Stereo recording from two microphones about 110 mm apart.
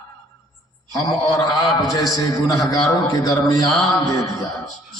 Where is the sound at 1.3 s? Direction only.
30° left (ahead or behind).